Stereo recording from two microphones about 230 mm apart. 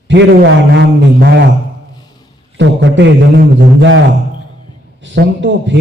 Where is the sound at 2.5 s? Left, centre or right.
Right.